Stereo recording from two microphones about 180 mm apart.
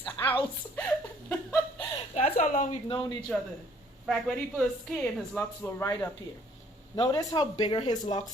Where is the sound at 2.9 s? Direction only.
25° left (ahead or behind).